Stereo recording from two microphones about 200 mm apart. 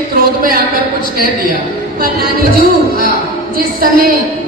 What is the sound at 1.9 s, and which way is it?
Music, 50° right (ahead or behind).